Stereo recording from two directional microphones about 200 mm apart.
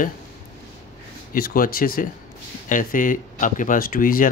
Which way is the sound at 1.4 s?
45° left (ahead or behind).